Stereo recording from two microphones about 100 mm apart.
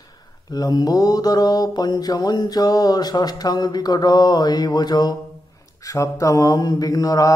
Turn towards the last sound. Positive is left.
turn(degrees=40)  # may be behind; listen again after turning